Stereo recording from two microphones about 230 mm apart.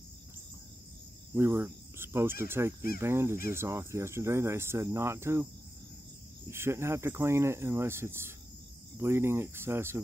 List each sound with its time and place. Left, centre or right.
1.3 s cricket: centre
3.0 s speech: centre
6.5 s speech: centre